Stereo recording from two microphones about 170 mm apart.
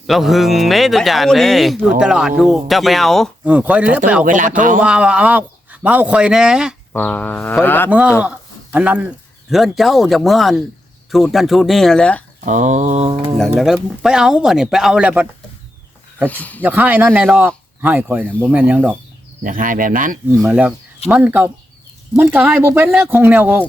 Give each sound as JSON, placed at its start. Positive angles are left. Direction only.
{"t": 0.1, "sound": "speech", "side_deg": 0}
{"t": 3.5, "sound": "speech", "side_deg": -10}
{"t": 4.2, "sound": "speech", "side_deg": -50}
{"t": 4.8, "sound": "speech", "side_deg": -5}
{"t": 6.9, "sound": "speech", "side_deg": 10}
{"t": 7.9, "sound": "speech", "side_deg": -5}
{"t": 12.5, "sound": "speech", "side_deg": -45}
{"t": 13.1, "sound": "speech", "side_deg": -30}
{"t": 13.4, "sound": "speech", "side_deg": 0}
{"t": 16.2, "sound": "speech", "side_deg": 10}
{"t": 16.6, "sound": "speech", "side_deg": -10}
{"t": 19.5, "sound": "speech", "side_deg": -50}
{"t": 20.3, "sound": "speech", "side_deg": -10}